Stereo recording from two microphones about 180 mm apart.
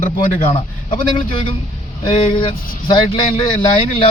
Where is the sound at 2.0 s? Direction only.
25° left (ahead or behind).